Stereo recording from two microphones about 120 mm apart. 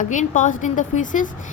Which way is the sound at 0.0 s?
90° left.